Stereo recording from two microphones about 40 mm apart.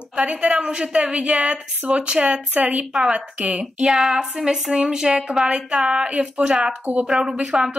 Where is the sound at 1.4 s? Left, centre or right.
Right.